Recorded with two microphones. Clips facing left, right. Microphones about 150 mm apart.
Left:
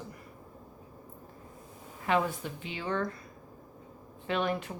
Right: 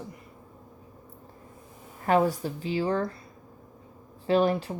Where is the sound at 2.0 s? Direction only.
40° right (ahead or behind).